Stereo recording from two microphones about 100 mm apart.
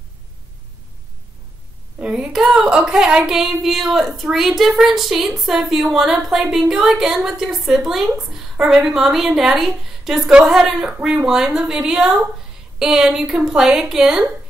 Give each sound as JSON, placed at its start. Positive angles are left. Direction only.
{"t": 2.0, "sound": "speech", "side_deg": -10}